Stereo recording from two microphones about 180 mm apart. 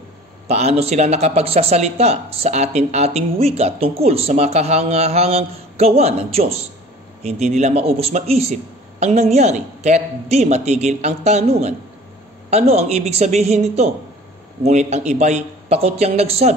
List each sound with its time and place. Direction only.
0.5 s speech: 35° right (ahead or behind)